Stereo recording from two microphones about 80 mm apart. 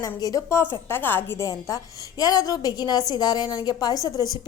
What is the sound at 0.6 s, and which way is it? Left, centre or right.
Speech, left.